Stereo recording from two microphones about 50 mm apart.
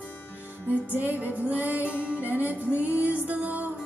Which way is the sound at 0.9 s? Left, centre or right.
Right.